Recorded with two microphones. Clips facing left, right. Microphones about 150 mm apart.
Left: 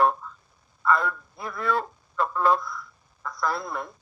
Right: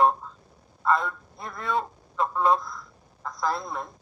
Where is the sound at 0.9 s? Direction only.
Centre (ahead or behind).